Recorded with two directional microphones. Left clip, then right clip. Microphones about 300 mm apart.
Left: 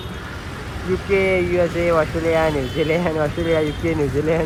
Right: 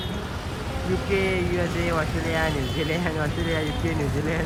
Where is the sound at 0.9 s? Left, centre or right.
Centre.